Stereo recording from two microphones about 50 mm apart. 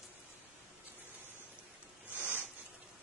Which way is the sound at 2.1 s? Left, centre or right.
Right.